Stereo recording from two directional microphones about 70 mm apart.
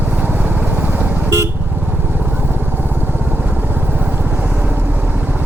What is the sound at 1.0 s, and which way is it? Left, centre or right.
Vehicle, right.